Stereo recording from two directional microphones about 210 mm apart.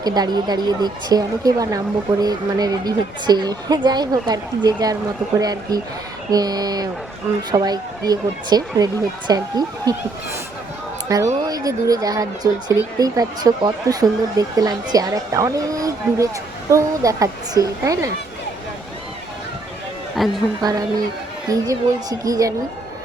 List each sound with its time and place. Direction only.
0.0 s a woman's voice: 20° right (ahead or behind)
11.1 s speech: 15° right (ahead or behind)
20.2 s a woman's voice: centre (ahead or behind)
20.6 s speech: 20° right (ahead or behind)